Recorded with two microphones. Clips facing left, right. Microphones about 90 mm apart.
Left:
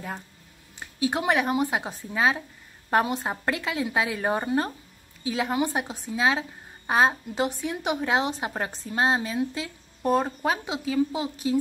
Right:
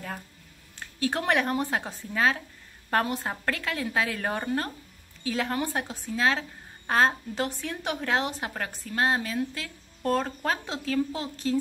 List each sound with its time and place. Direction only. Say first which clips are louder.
0.7 s a woman's voice: left 2 dB; 15° left (ahead or behind)